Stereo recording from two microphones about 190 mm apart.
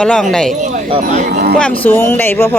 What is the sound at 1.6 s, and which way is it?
Speech, 10° left (ahead or behind).